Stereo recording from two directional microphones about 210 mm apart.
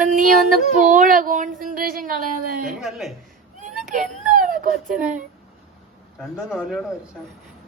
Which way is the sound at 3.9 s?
40° right (ahead or behind).